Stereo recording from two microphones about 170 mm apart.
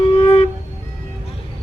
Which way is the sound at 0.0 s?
40° left (ahead or behind).